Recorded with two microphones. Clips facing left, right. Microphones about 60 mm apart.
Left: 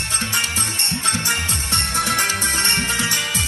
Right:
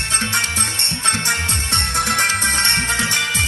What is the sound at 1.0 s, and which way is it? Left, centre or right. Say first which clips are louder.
Music: right 3 dB; right.